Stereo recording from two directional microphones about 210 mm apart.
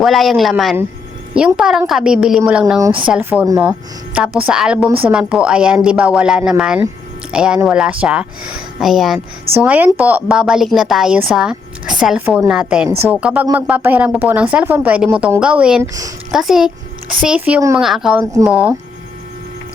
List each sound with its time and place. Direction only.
0.0 s a woman's voice: centre (ahead or behind)
2.7 s speech: 20° right (ahead or behind)
3.1 s a woman's voice: 5° right (ahead or behind)